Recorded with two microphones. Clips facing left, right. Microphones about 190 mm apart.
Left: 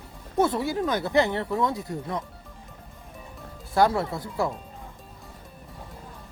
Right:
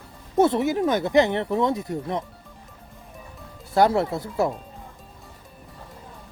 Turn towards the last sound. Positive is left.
turn(degrees=-25)  # may be behind; listen again after turning